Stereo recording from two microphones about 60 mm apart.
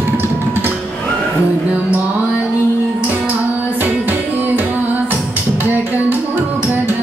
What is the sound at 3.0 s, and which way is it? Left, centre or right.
Music, right.